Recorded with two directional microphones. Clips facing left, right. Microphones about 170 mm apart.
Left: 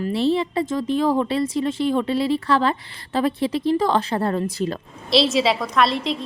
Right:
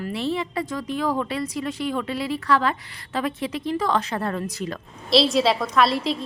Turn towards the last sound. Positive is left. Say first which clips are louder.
# even
turn(degrees=0)  # may be behind; listen again after turning